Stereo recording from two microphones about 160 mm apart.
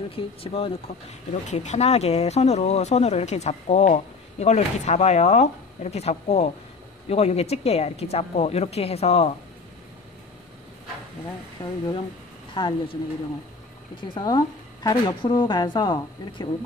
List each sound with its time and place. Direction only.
0.1 s speech: 35° left (ahead or behind)
11.6 s speech: 15° left (ahead or behind)
12.5 s speech: 30° left (ahead or behind)
14.0 s a woman's voice: 30° left (ahead or behind)